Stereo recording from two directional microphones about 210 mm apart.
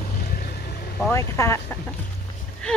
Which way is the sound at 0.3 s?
45° left (ahead or behind).